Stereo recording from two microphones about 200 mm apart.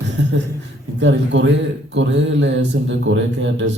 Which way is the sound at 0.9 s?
65° right (ahead or behind).